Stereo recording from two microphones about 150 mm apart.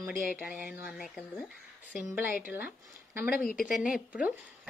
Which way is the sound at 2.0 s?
15° right (ahead or behind).